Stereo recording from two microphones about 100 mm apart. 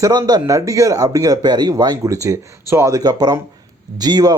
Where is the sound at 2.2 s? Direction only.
30° right (ahead or behind).